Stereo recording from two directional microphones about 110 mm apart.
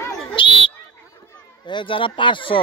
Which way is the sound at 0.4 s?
50° left (ahead or behind).